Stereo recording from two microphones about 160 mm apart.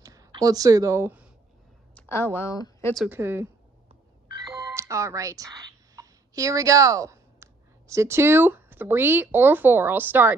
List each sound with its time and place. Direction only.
0.0 s speech: 20° right (ahead or behind)
2.0 s speech: 15° left (ahead or behind)
3.1 s a woman's voice: 15° right (ahead or behind)